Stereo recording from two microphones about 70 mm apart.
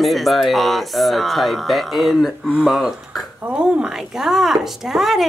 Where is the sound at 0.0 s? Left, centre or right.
Centre.